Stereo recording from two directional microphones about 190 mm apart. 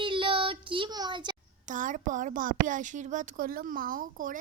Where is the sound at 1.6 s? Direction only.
45° right (ahead or behind).